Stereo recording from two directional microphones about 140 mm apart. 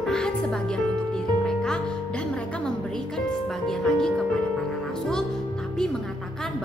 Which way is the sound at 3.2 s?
5° left (ahead or behind).